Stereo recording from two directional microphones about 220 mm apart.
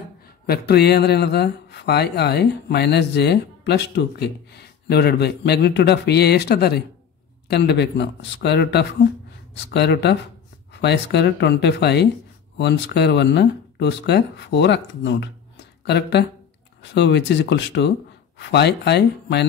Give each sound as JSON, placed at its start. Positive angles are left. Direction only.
{"t": 0.5, "sound": "speech", "side_deg": 45}